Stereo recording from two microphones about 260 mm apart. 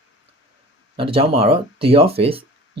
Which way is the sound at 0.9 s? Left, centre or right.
Right.